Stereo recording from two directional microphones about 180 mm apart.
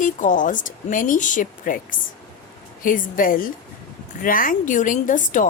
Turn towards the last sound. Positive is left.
turn(degrees=45)  # may be behind; listen again after turning